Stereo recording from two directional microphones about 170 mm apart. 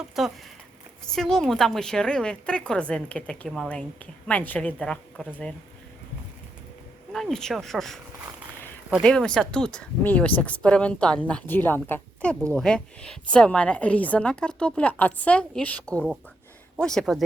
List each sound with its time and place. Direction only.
0.2 s a woman's voice: centre (ahead or behind)
7.1 s a woman's voice: centre (ahead or behind)
9.0 s a woman's voice: 5° left (ahead or behind)